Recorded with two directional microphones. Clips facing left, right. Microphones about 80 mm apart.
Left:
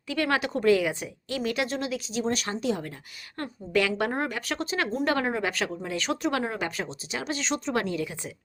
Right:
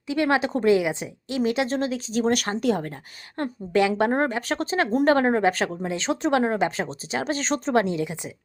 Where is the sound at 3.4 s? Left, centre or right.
Right.